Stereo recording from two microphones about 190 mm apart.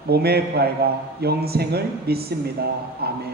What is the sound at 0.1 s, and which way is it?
A man's voice, 55° right (ahead or behind).